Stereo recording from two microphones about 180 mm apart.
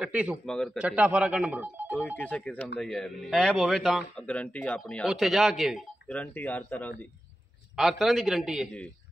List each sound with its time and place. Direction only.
0.0 s speech: 5° right (ahead or behind)
2.1 s a man's voice: 5° left (ahead or behind)